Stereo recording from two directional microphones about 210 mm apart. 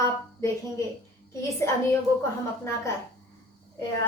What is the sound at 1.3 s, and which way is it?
Speech, 15° left (ahead or behind).